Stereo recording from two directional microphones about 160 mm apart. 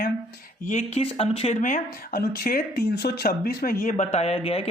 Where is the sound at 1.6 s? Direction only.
55° left (ahead or behind).